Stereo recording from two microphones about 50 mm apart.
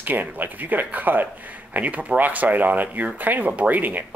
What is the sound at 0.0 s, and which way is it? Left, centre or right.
Speech, right.